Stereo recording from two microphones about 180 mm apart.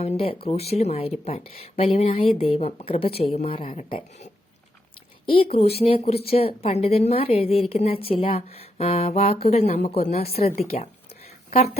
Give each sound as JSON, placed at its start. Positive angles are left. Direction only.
{"t": 0.4, "sound": "speech", "side_deg": 35}
{"t": 3.7, "sound": "speech", "side_deg": 45}
{"t": 5.2, "sound": "speech", "side_deg": 30}